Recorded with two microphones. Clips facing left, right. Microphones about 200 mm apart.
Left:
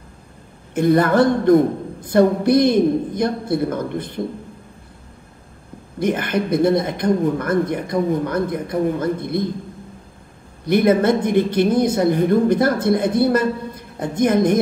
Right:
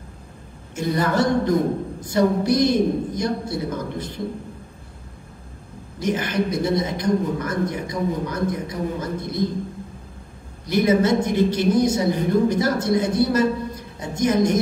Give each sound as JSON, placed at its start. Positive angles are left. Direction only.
{"t": 0.7, "sound": "a woman's voice", "side_deg": 55}
{"t": 5.9, "sound": "a woman's voice", "side_deg": 55}
{"t": 10.6, "sound": "a woman's voice", "side_deg": 55}